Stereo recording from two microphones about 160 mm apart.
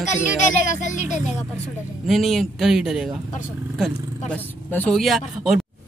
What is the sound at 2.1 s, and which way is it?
Speech, centre (ahead or behind).